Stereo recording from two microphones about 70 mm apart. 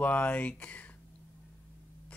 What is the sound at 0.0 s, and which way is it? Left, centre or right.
Speech, left.